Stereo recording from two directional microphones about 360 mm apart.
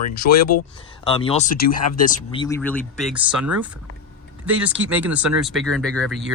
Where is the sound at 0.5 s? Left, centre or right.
Left.